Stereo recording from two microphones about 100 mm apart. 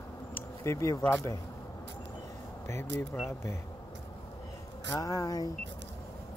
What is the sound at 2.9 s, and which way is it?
Speech, 20° left (ahead or behind).